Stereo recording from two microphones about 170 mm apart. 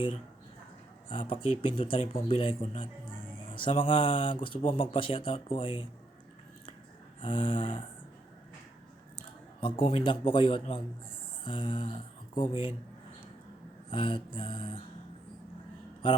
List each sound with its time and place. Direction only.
1.1 s speech: 30° left (ahead or behind)
7.2 s speech: 30° left (ahead or behind)
9.1 s a sound: 30° left (ahead or behind)
9.8 s speech: 30° left (ahead or behind)
13.9 s speech: 30° left (ahead or behind)